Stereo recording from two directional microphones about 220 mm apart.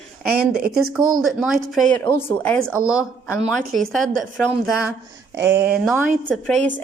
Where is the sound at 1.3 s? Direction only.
Centre (ahead or behind).